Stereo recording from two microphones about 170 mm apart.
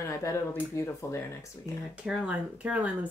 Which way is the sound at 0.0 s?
15° left (ahead or behind).